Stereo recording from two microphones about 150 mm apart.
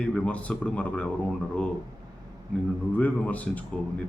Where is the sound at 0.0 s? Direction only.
10° left (ahead or behind).